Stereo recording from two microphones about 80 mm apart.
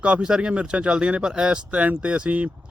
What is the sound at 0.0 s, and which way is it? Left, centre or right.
Speech, centre.